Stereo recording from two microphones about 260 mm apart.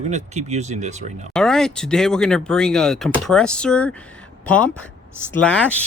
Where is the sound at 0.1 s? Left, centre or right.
Right.